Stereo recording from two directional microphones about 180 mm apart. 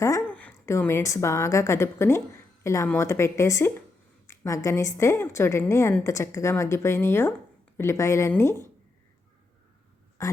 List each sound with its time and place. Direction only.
0.0 s a woman's voice: 10° left (ahead or behind)
10.2 s speech: 20° left (ahead or behind)